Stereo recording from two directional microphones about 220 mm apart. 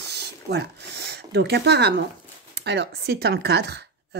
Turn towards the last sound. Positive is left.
turn(degrees=-50)  # may be behind; listen again after turning